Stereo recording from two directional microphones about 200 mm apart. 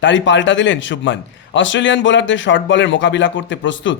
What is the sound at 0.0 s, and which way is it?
A man's voice, 65° left (ahead or behind).